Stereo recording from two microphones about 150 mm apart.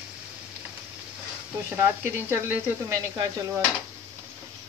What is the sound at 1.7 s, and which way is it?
Speech, 15° right (ahead or behind).